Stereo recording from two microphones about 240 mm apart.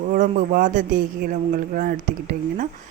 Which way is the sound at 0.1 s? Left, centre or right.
Right.